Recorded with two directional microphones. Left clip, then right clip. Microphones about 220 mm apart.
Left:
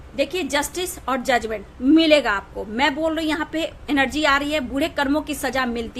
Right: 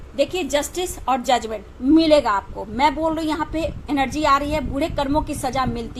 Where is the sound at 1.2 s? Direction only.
45° left (ahead or behind).